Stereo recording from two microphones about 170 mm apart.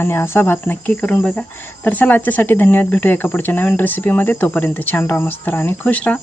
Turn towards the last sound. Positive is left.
turn(degrees=10)  # may be behind; listen again after turning